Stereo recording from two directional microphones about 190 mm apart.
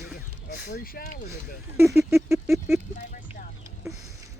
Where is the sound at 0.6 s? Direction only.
50° left (ahead or behind).